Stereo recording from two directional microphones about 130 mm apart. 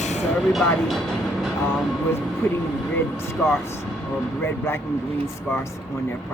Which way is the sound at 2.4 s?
20° left (ahead or behind).